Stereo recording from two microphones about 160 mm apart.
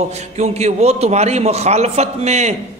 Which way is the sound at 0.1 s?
45° right (ahead or behind).